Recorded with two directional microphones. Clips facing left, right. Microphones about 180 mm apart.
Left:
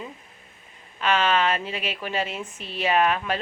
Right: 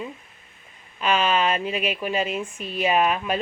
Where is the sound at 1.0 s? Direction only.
15° right (ahead or behind).